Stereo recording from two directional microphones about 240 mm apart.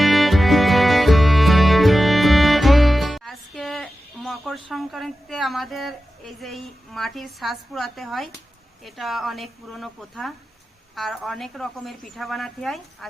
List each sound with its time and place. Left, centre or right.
0.0 s music: centre
8.8 s a woman's voice: centre